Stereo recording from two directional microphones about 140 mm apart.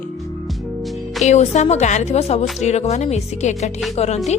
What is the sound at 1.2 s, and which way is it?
Speech, 55° left (ahead or behind).